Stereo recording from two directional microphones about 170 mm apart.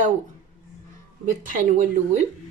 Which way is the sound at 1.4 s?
50° right (ahead or behind).